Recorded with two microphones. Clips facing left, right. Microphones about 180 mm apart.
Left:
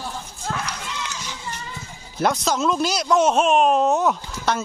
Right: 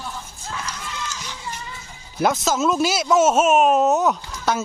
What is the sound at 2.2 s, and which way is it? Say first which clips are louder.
Speech: right 1 dB; centre (ahead or behind).